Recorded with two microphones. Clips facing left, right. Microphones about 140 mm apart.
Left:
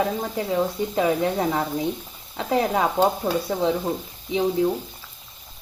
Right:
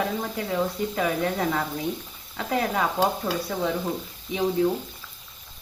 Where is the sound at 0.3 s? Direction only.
20° left (ahead or behind).